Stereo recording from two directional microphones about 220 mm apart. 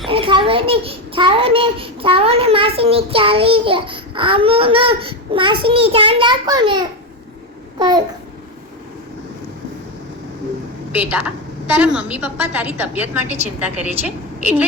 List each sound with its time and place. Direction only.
0.1 s a child's voice: 25° right (ahead or behind)
10.9 s a woman's voice: 5° right (ahead or behind)
14.4 s a woman's voice: 5° right (ahead or behind)